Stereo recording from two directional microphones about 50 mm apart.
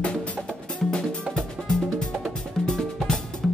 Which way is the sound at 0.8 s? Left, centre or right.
Centre.